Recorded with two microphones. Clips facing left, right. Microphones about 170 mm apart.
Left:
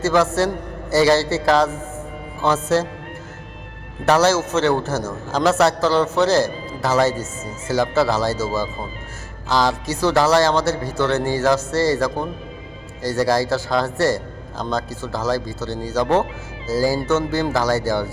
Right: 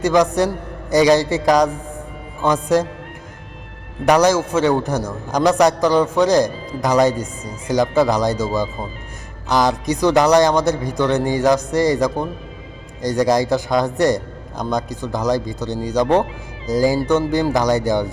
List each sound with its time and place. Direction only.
0.0 s a man's voice: 15° right (ahead or behind)
4.0 s a man's voice: 15° right (ahead or behind)